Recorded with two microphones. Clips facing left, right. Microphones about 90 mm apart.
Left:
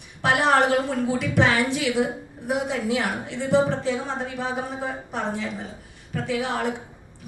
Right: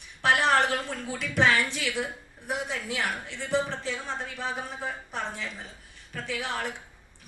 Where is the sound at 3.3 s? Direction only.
40° left (ahead or behind).